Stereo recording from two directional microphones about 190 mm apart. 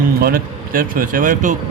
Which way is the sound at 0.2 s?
50° right (ahead or behind).